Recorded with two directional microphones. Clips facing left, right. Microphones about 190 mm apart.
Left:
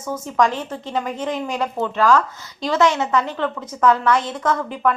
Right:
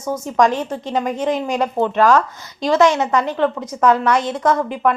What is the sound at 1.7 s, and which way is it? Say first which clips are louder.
Speech: right 3 dB; 55° right (ahead or behind).